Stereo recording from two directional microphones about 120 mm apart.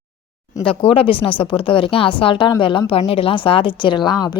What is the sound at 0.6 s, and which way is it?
A woman's voice, 50° left (ahead or behind).